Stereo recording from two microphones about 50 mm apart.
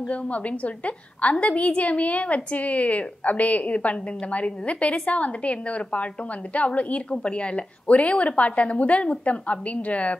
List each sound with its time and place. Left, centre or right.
0.1 s a woman's voice: left